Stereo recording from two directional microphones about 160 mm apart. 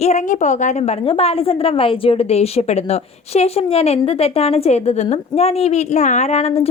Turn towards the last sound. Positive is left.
turn(degrees=40)  # may be behind; listen again after turning